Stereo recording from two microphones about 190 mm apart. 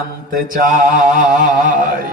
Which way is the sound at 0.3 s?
50° right (ahead or behind).